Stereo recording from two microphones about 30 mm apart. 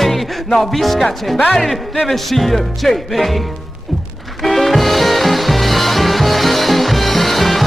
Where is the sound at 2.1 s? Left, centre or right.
Centre.